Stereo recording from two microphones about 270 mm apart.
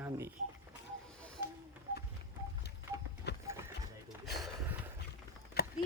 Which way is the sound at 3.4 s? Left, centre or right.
Centre.